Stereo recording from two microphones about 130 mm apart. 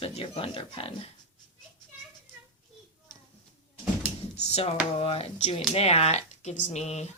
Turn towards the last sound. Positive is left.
turn(degrees=60)  # may be behind; listen again after turning